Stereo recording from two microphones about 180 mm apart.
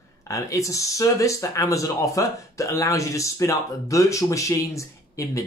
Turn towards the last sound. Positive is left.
turn(degrees=20)  # may be behind; listen again after turning